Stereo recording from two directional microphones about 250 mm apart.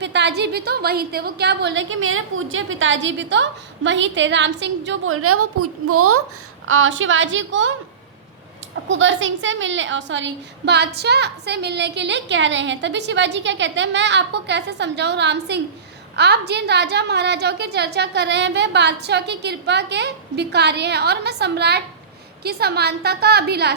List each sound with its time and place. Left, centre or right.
0.0 s a woman's voice: right
6.7 s a woman's voice: right
8.7 s a woman's voice: right